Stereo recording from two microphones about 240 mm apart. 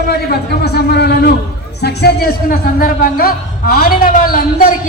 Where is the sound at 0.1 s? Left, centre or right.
Left.